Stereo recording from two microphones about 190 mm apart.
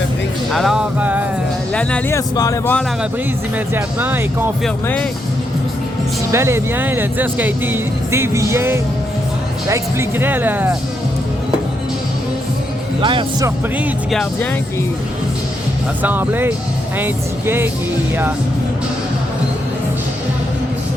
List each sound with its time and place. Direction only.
0.5 s music: centre (ahead or behind)
1.7 s speech: 5° left (ahead or behind)
3.8 s speech: 10° right (ahead or behind)
4.6 s music: 5° left (ahead or behind)
6.3 s speech: 15° right (ahead or behind)
13.0 s speech: 25° right (ahead or behind)
13.7 s music: 5° right (ahead or behind)
16.0 s speech: 10° right (ahead or behind)